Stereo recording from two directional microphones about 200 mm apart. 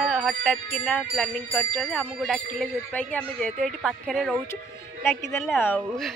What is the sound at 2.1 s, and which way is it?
Speech, centre (ahead or behind).